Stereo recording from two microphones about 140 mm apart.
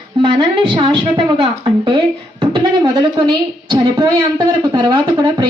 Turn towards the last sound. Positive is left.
turn(degrees=-35)  # may be behind; listen again after turning